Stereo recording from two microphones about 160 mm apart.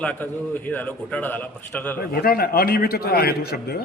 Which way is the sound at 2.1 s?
70° left (ahead or behind).